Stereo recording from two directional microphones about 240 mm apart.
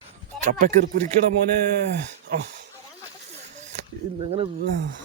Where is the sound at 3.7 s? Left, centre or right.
Right.